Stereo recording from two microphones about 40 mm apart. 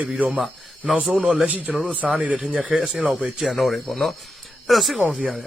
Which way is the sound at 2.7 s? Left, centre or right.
Centre.